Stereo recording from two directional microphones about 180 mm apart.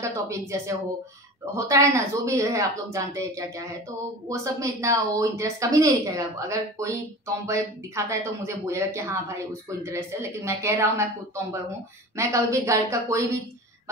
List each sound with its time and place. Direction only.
0.0 s speech: 15° right (ahead or behind)